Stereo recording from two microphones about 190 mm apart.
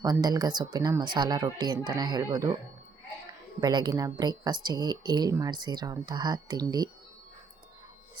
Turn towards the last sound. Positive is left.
turn(degrees=-20)  # may be behind; listen again after turning